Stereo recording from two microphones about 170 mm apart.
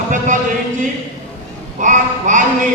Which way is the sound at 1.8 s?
50° right (ahead or behind).